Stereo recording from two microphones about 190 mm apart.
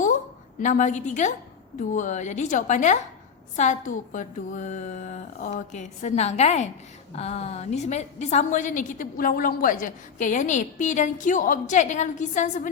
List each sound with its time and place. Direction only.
0.6 s a woman's voice: 40° left (ahead or behind)